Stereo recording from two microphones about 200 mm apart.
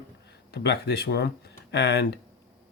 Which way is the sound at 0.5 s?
55° left (ahead or behind).